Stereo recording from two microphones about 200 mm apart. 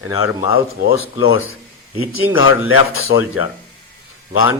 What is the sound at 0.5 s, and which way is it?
Speech, 90° left.